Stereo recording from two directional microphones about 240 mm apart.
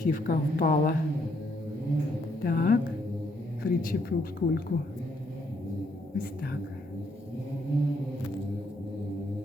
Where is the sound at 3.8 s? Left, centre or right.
Left.